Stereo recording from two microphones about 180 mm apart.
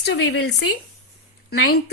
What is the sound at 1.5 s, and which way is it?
Speech, 60° left (ahead or behind).